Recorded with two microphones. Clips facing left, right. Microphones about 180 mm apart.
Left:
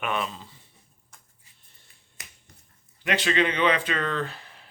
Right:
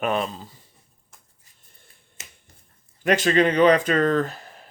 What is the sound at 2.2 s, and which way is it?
Finger snapping, 25° right (ahead or behind).